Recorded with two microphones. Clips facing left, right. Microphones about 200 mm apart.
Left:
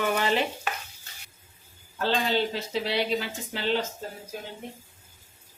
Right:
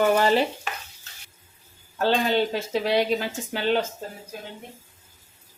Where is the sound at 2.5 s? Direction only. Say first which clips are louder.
Right 5 dB; 45° right (ahead or behind).